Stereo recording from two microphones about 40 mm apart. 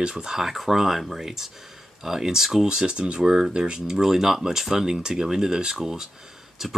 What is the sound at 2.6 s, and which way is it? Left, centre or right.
Speech, centre.